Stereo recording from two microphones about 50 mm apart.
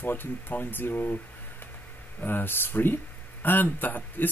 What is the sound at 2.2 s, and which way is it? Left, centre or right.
Speech, left.